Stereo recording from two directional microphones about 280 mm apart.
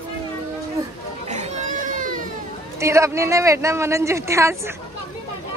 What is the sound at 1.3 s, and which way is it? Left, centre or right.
Baby cry, right.